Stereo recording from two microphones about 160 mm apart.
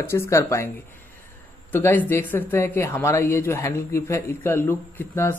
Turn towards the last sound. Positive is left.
turn(degrees=10)  # may be behind; listen again after turning